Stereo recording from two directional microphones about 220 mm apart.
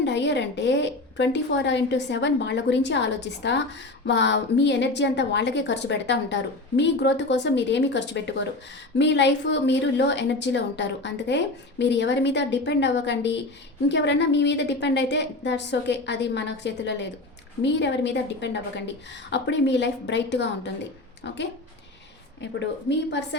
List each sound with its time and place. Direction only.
0.0 s a woman's voice: 50° left (ahead or behind)